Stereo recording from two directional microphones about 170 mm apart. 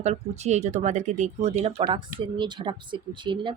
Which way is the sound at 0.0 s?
40° right (ahead or behind).